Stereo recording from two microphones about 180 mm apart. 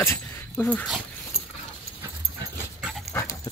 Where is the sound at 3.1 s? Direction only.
15° left (ahead or behind).